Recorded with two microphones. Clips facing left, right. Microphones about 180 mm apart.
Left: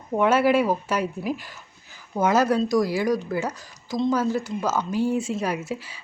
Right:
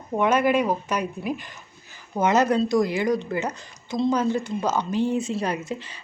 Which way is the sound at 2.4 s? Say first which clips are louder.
Even; 25° right (ahead or behind).